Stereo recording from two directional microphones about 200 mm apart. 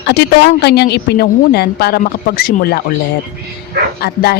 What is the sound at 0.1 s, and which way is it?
A woman's voice, 55° left (ahead or behind).